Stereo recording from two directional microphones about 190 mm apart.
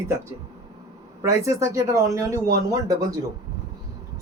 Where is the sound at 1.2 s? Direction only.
15° right (ahead or behind).